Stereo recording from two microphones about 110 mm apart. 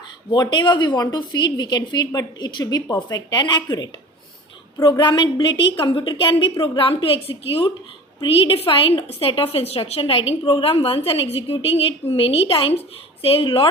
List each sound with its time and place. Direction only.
0.3 s a woman's voice: 45° left (ahead or behind)